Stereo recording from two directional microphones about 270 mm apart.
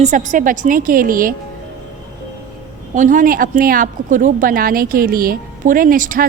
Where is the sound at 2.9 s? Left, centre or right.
Right.